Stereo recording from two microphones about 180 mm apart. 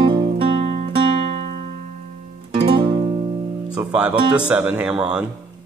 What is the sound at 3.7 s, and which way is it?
Speech, 5° right (ahead or behind).